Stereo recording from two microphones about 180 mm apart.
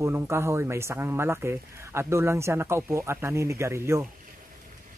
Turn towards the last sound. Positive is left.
turn(degrees=-15)  # may be behind; listen again after turning